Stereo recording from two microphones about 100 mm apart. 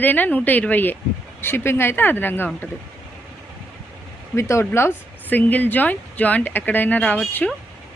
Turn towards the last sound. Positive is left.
turn(degrees=10)  # may be behind; listen again after turning